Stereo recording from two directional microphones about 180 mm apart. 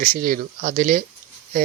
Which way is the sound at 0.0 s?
50° right (ahead or behind).